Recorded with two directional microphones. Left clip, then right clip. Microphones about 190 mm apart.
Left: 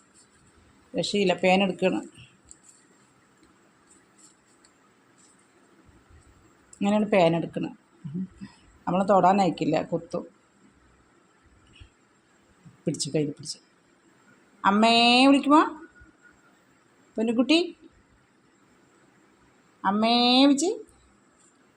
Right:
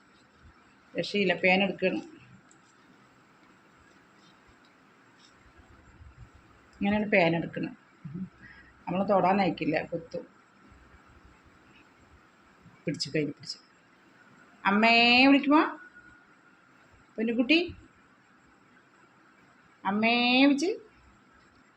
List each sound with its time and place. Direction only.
0.9 s speech: 45° left (ahead or behind)
6.7 s a woman's voice: 45° left (ahead or behind)
8.8 s speech: 45° left (ahead or behind)
12.8 s a woman's voice: 40° left (ahead or behind)
14.6 s a woman's voice: 40° left (ahead or behind)
17.2 s speech: 45° left (ahead or behind)
19.8 s a woman's voice: 40° left (ahead or behind)